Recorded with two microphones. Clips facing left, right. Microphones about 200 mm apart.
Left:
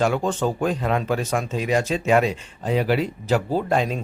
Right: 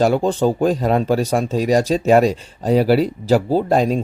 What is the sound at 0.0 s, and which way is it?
Speech, 35° right (ahead or behind).